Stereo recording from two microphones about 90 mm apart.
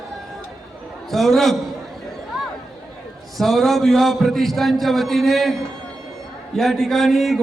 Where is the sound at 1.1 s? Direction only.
5° left (ahead or behind).